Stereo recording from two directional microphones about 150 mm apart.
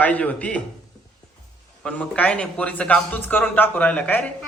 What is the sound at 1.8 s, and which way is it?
A man's voice, 10° left (ahead or behind).